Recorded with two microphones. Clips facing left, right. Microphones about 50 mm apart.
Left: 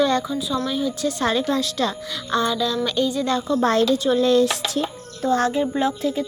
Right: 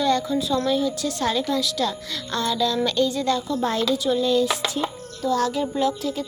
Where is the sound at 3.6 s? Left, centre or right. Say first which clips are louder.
Left 4 dB; left.